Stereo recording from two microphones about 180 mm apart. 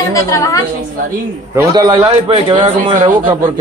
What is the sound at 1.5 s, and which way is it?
A man's voice, 15° right (ahead or behind).